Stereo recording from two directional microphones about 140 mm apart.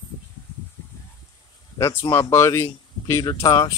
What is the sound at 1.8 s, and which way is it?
Music, 15° left (ahead or behind).